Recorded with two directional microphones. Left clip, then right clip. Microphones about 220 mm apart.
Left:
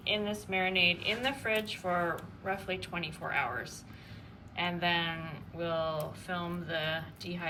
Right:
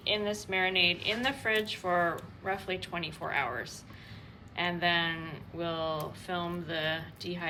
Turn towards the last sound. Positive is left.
turn(degrees=-5)  # may be behind; listen again after turning